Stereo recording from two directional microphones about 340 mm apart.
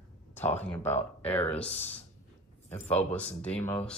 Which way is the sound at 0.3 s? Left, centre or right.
Centre.